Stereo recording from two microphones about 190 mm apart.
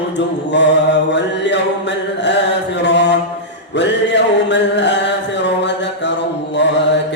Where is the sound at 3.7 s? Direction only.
65° left (ahead or behind).